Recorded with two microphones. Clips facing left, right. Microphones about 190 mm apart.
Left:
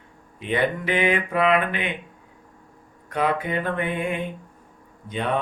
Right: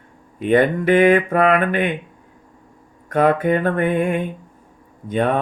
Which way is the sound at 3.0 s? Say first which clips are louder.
Right 8 dB; 50° right (ahead or behind).